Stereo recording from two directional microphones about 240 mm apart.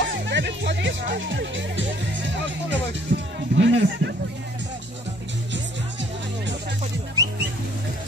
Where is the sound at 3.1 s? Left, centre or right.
Right.